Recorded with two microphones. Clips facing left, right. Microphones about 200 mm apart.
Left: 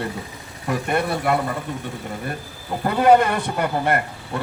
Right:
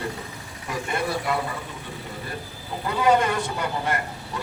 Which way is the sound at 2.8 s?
55° left (ahead or behind).